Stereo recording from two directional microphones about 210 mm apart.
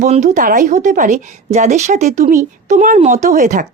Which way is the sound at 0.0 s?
35° right (ahead or behind).